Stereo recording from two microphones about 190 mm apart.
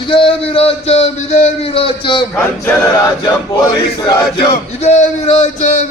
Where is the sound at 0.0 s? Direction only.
30° left (ahead or behind).